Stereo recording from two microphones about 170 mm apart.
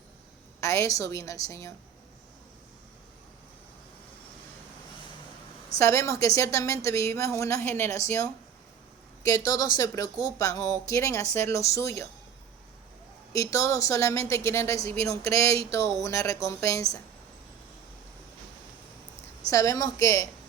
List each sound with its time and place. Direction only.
0.6 s speech: 20° left (ahead or behind)
5.8 s speech: 15° left (ahead or behind)
13.3 s speech: 20° left (ahead or behind)
19.5 s speech: 20° left (ahead or behind)